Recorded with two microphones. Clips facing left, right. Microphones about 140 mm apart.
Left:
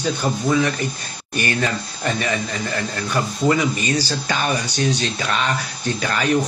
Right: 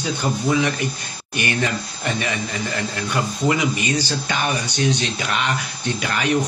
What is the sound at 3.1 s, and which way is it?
Speech, 15° right (ahead or behind).